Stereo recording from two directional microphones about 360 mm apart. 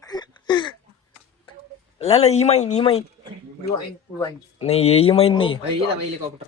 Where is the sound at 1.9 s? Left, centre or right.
Centre.